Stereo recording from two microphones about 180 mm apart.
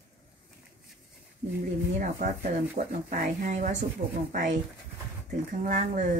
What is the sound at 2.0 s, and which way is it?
Speech, 50° right (ahead or behind).